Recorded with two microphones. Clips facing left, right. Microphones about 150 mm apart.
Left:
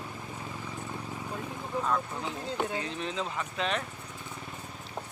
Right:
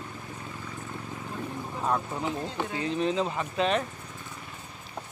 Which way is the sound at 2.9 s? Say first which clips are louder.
Right 7 dB; 35° right (ahead or behind).